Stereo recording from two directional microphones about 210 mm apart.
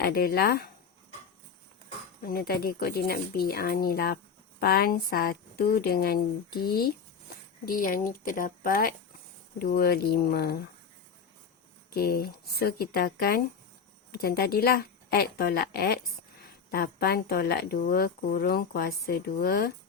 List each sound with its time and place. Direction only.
0.0 s speech: 45° left (ahead or behind)
2.2 s speech: 45° left (ahead or behind)
11.9 s speech: 45° left (ahead or behind)